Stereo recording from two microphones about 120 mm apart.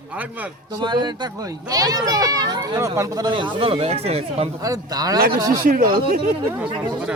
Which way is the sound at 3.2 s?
40° right (ahead or behind).